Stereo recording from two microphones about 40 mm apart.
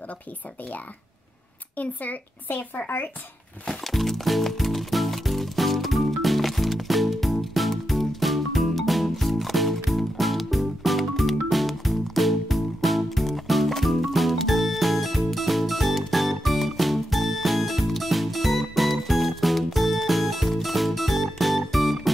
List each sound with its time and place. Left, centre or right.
1.8 s speech: left
3.6 s music: centre